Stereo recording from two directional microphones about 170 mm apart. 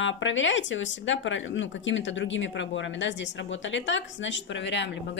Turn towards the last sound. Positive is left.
turn(degrees=90)